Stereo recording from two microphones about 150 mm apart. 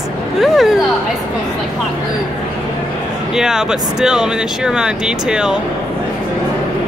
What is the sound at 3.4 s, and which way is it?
Speech, 5° right (ahead or behind).